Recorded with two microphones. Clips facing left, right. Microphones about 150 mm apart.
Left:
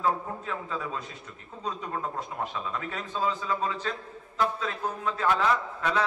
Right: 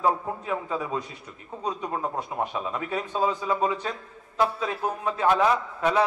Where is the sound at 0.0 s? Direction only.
15° right (ahead or behind).